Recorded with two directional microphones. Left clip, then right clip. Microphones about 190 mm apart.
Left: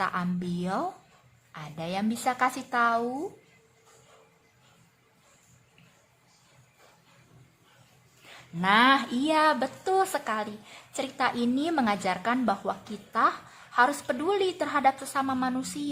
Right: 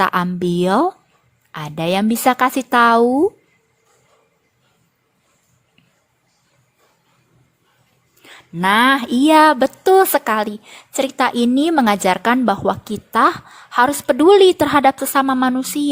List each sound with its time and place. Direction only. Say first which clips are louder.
0.0 s speech: right 13 dB; 45° right (ahead or behind)
8.3 s a woman's voice: right 8 dB; 40° right (ahead or behind)